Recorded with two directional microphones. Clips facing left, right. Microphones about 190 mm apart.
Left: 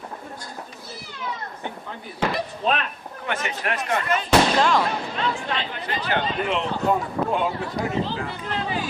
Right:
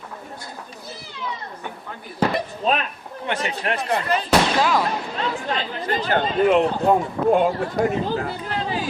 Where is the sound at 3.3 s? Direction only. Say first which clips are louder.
Right 2 dB; 30° right (ahead or behind).